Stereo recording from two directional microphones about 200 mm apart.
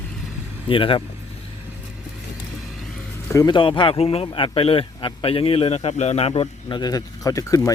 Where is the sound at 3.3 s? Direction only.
20° left (ahead or behind).